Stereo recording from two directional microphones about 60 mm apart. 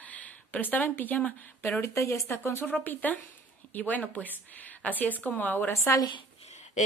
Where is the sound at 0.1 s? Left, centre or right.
Left.